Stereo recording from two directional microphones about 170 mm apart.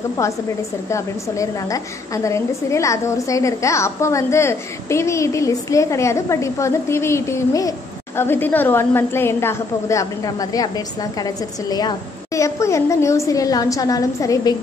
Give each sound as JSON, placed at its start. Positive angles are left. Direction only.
{"t": 0.8, "sound": "a woman's voice", "side_deg": 15}